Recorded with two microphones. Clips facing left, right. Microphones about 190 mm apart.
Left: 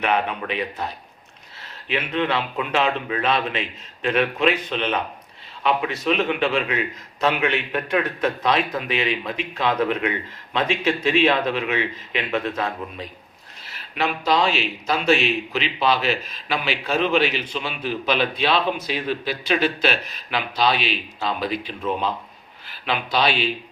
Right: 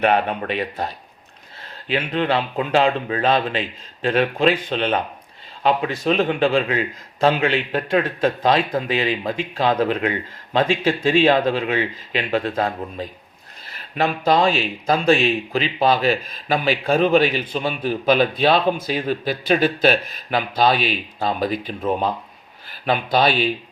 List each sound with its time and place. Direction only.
0.0 s speech: 40° right (ahead or behind)
13.7 s a man's voice: 50° right (ahead or behind)
15.0 s a man's voice: 35° right (ahead or behind)